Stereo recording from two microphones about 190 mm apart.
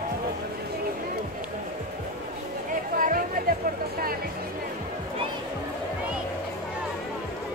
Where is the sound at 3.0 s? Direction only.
45° right (ahead or behind).